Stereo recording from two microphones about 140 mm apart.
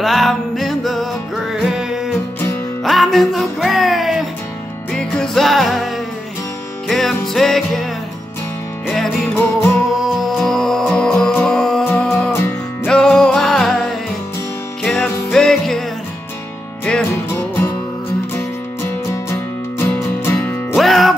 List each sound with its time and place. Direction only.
0.0 s music: centre (ahead or behind)
6.9 s music: centre (ahead or behind)
12.1 s music: centre (ahead or behind)
16.8 s music: 10° left (ahead or behind)
19.8 s music: 15° left (ahead or behind)
20.7 s music: centre (ahead or behind)